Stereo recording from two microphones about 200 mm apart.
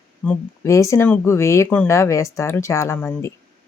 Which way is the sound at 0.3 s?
15° left (ahead or behind).